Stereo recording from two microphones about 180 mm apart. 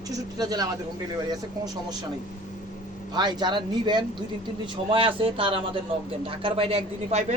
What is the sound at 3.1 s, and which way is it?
Speech, 25° right (ahead or behind).